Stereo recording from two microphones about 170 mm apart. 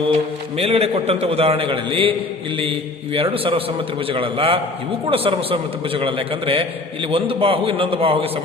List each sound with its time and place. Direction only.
0.1 s a man's voice: 35° right (ahead or behind)